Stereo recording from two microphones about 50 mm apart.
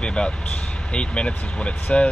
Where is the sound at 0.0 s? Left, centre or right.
Centre.